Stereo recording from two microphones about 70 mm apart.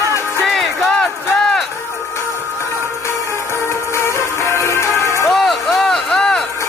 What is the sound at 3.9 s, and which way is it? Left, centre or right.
Music, left.